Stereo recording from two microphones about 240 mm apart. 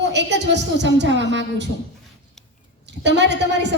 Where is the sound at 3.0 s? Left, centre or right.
Right.